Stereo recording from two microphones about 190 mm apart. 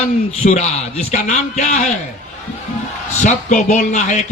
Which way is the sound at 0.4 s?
35° left (ahead or behind).